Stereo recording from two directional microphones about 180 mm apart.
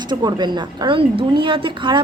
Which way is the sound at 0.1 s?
25° right (ahead or behind).